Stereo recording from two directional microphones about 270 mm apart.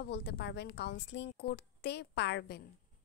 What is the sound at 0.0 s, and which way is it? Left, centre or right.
A woman's voice, left.